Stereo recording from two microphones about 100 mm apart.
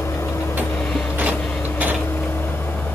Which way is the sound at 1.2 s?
15° right (ahead or behind).